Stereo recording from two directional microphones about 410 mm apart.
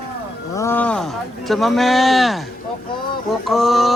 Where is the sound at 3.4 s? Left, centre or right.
Centre.